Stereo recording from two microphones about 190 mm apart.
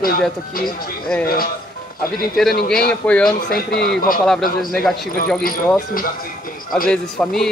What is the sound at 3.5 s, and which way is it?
Speech, 55° left (ahead or behind).